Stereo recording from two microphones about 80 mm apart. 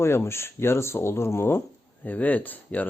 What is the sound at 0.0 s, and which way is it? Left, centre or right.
Speech, left.